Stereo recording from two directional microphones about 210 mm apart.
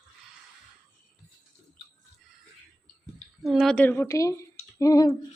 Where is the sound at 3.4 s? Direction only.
Centre (ahead or behind).